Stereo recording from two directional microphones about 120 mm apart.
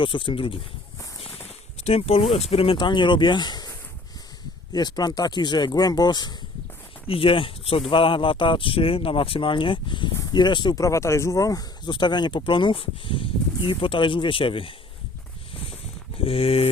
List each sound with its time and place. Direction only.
0.0 s speech: 45° left (ahead or behind)
1.8 s speech: 55° left (ahead or behind); by 6.3 s 35° left (ahead or behind)
7.1 s speech: 50° left (ahead or behind)
16.1 s speech: 55° left (ahead or behind)